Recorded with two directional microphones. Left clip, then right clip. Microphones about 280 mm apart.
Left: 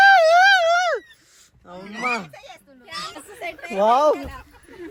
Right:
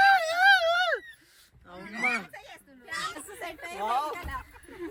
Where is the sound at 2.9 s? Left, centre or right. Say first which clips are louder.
Left 2 dB; centre.